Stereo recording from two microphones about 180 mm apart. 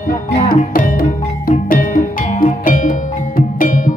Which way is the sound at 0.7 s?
50° left (ahead or behind).